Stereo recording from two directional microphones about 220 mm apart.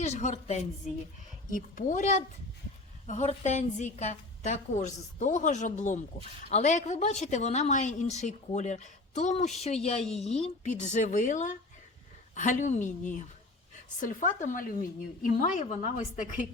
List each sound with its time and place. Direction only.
0.0 s a woman's voice: 30° left (ahead or behind)